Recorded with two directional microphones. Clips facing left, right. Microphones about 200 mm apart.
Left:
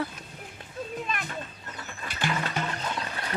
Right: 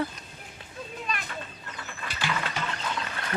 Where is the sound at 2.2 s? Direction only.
50° left (ahead or behind).